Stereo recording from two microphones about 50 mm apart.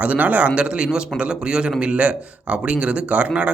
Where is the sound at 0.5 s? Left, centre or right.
Right.